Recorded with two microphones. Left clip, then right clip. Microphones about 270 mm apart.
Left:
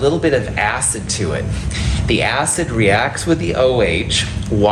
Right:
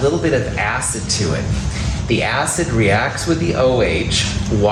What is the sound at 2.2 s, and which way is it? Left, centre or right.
A man's voice, left.